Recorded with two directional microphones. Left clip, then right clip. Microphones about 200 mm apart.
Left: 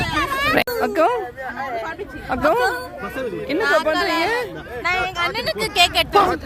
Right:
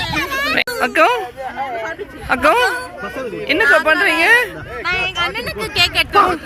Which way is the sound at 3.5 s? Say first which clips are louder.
Right 6 dB; 10° left (ahead or behind).